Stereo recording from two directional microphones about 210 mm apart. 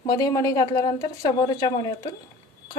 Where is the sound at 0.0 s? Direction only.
15° left (ahead or behind).